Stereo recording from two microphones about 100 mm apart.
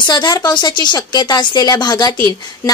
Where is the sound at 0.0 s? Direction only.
45° left (ahead or behind).